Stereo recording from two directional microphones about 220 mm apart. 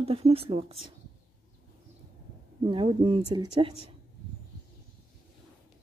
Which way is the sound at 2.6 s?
25° right (ahead or behind).